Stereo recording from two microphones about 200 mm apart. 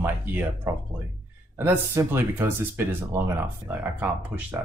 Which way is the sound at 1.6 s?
10° right (ahead or behind).